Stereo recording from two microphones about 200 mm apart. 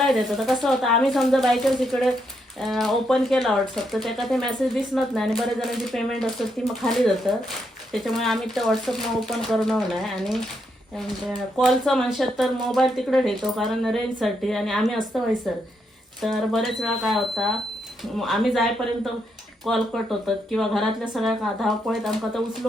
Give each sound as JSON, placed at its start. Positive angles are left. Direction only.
{"t": 0.0, "sound": "speech", "side_deg": 0}
{"t": 19.6, "sound": "speech", "side_deg": 0}